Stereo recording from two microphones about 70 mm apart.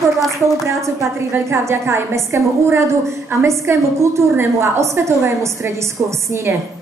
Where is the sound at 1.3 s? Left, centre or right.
Right.